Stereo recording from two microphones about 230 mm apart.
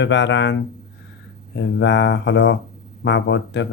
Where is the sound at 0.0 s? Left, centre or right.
Left.